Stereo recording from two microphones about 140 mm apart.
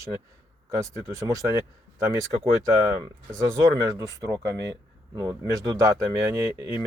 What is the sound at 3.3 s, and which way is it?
Speech, 20° right (ahead or behind).